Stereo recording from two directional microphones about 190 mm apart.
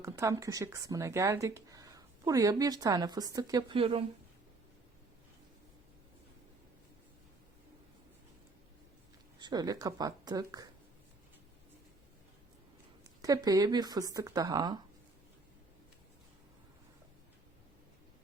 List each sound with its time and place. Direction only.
0.0 s speech: 15° right (ahead or behind)
9.4 s speech: 20° right (ahead or behind)
13.2 s speech: 20° right (ahead or behind)